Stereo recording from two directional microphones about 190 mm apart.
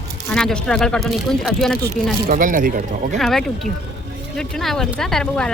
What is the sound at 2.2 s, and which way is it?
Speech, 45° right (ahead or behind).